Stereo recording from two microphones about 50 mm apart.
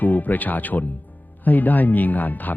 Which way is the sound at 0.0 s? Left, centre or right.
Left.